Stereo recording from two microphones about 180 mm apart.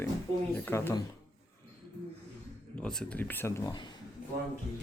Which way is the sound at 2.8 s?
5° left (ahead or behind).